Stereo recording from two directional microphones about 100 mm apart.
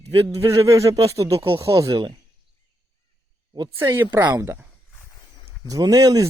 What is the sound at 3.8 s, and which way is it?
Speech, 25° right (ahead or behind).